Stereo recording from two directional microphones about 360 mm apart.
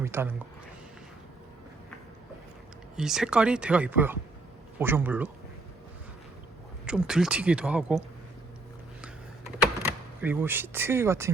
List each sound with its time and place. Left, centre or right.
0.0 s speech: centre
2.9 s speech: centre
6.8 s speech: centre
9.8 s speech: centre